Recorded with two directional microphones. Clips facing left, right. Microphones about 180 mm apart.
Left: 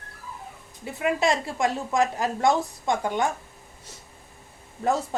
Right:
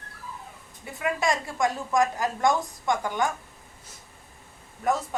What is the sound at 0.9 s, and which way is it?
A woman's voice, 25° left (ahead or behind).